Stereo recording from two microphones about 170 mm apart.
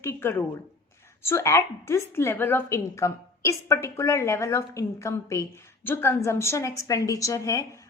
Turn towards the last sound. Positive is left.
turn(degrees=20)  # may be behind; listen again after turning